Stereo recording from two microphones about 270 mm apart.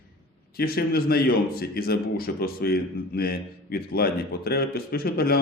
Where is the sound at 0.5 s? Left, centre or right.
Left.